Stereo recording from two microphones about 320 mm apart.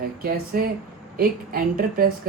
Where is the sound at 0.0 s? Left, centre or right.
Right.